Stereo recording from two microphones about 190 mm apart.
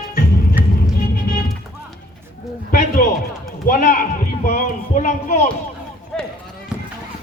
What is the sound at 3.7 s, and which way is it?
Run, 45° left (ahead or behind).